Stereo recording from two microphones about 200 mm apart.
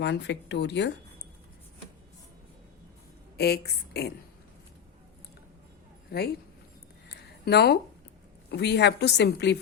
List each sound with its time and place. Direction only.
0.0 s a woman's voice: 60° left (ahead or behind)
3.3 s a woman's voice: 55° left (ahead or behind)
6.1 s speech: 55° left (ahead or behind)
7.1 s a sound: 55° left (ahead or behind)
8.4 s a woman's voice: 55° left (ahead or behind)